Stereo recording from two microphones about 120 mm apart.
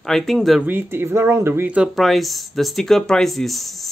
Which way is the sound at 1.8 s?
Centre (ahead or behind).